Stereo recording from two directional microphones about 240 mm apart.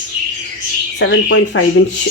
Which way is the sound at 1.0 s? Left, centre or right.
Left.